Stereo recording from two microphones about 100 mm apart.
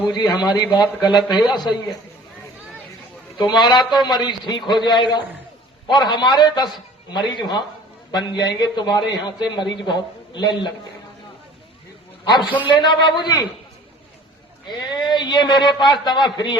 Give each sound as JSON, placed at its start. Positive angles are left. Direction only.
{"t": 0.1, "sound": "a man's voice", "side_deg": 45}
{"t": 1.5, "sound": "a man's voice", "side_deg": 0}
{"t": 3.3, "sound": "a man's voice", "side_deg": 45}
{"t": 12.2, "sound": "a man's voice", "side_deg": 50}
{"t": 14.7, "sound": "a man's voice", "side_deg": 45}